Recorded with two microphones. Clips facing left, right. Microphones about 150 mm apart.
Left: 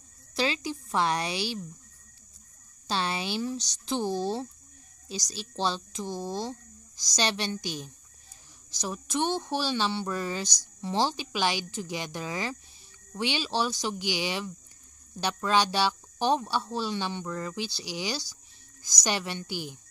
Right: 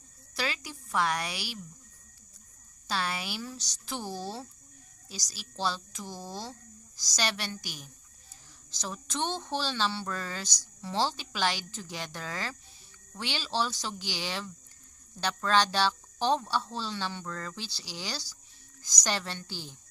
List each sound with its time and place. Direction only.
0.3 s speech: 25° left (ahead or behind)
2.9 s speech: 25° left (ahead or behind)